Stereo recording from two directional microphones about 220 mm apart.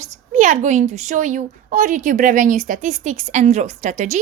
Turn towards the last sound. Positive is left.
turn(degrees=-35)  # may be behind; listen again after turning